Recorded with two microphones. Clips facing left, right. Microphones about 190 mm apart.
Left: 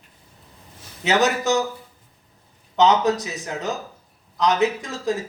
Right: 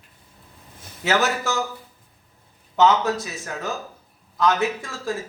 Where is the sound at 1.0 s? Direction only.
20° left (ahead or behind).